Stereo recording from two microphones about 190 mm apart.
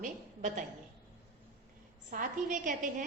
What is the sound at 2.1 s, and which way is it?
Speech, 45° right (ahead or behind).